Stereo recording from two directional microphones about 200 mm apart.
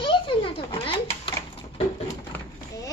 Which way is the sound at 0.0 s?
25° left (ahead or behind).